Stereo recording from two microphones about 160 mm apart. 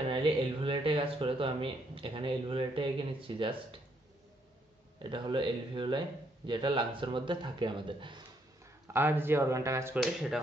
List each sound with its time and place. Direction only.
0.1 s speech: 30° right (ahead or behind)
5.1 s speech: 30° right (ahead or behind)
8.9 s speech: 15° right (ahead or behind)